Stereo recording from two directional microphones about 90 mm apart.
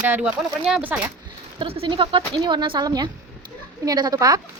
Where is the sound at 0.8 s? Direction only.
20° right (ahead or behind).